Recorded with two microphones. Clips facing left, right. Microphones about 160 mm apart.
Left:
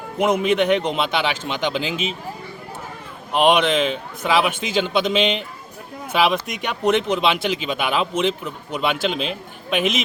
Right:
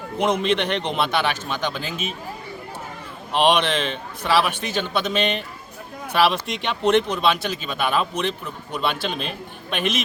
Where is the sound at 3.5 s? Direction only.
10° left (ahead or behind).